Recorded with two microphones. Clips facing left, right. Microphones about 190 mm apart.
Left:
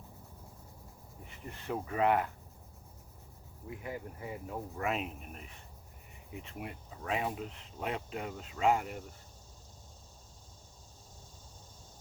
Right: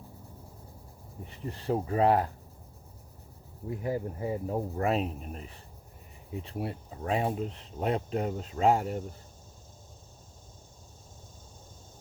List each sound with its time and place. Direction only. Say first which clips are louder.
1.2 s speech: right 8 dB; 35° right (ahead or behind)
3.7 s speech: right 9 dB; 35° right (ahead or behind)